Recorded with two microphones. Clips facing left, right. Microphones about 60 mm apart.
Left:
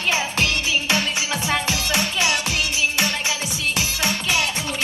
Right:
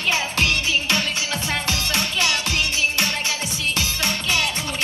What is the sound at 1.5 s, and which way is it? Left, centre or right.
Music, left.